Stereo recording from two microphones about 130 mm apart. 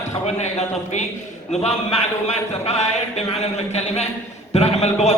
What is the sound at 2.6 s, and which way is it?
Speech, 55° left (ahead or behind).